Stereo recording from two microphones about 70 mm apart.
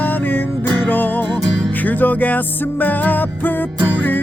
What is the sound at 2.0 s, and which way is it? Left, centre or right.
Music, left.